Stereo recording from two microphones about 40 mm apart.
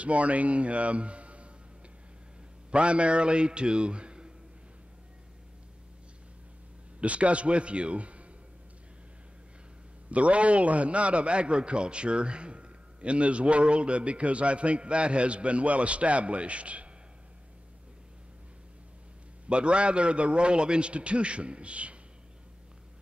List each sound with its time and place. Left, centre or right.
0.0 s speech: right
2.7 s a man's voice: right
7.0 s a man's voice: right
10.1 s a man's voice: right
19.5 s a man's voice: right